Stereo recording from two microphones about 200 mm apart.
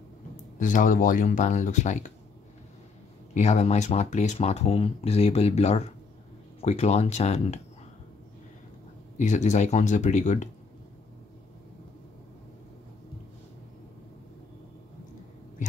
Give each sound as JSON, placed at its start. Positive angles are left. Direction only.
{"t": 0.6, "sound": "speech", "side_deg": 40}
{"t": 3.3, "sound": "speech", "side_deg": 35}
{"t": 9.2, "sound": "speech", "side_deg": 35}